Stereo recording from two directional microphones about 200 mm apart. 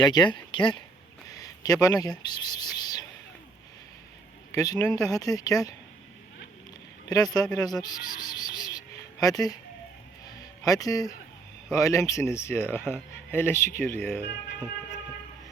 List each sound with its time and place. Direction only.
0.0 s speech: 20° left (ahead or behind)
1.3 s a sound: 20° left (ahead or behind)
4.5 s speech: 15° left (ahead or behind)
7.1 s speech: 20° left (ahead or behind)
10.2 s a sound: 15° left (ahead or behind)
11.7 s speech: 15° left (ahead or behind)